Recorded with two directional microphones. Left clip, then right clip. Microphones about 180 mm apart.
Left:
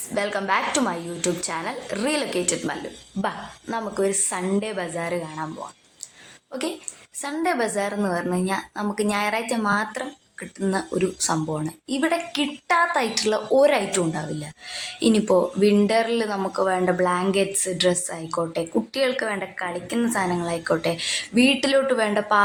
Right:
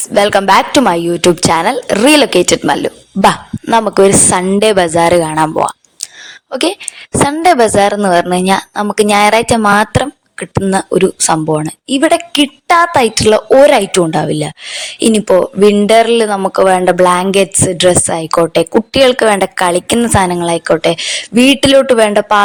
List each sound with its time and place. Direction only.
0.1 s a woman's voice: 60° right (ahead or behind)
0.8 s a woman's voice: 55° right (ahead or behind)
6.5 s a woman's voice: 55° right (ahead or behind)
20.0 s a woman's voice: 50° right (ahead or behind)